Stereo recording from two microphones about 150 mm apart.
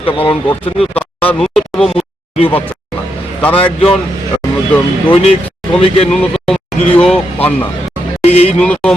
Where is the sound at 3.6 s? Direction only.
5° left (ahead or behind).